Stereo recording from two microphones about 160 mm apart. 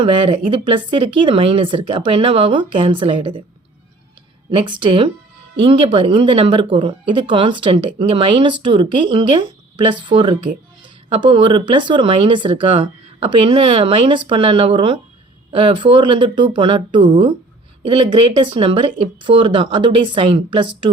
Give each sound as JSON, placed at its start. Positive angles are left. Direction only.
{"t": 0.0, "sound": "speech", "side_deg": -35}
{"t": 4.5, "sound": "speech", "side_deg": -30}